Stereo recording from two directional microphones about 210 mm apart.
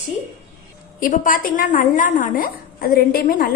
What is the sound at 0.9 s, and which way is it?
A woman's voice, 40° left (ahead or behind).